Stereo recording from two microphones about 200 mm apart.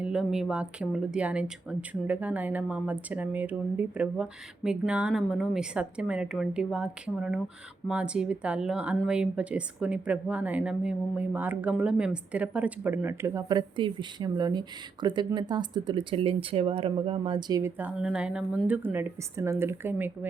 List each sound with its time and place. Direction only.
0.0 s a woman's voice: 5° right (ahead or behind); by 17.6 s 25° right (ahead or behind)
17.6 s speech: 10° right (ahead or behind)